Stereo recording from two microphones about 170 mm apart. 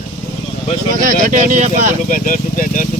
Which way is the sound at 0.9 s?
50° right (ahead or behind).